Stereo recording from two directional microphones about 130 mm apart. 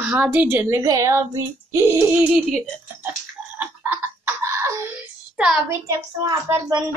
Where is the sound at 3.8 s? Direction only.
20° right (ahead or behind).